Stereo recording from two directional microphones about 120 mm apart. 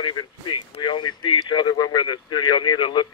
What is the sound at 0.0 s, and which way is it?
Speech, 40° left (ahead or behind).